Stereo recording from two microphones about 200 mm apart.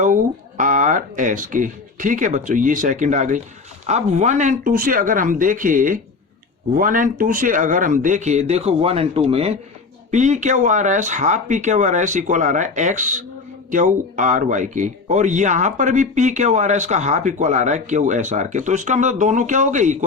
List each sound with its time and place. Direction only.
0.0 s speech: 40° right (ahead or behind)